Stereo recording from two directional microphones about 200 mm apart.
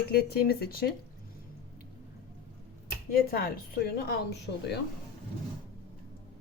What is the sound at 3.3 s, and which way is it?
A woman's voice, 50° left (ahead or behind).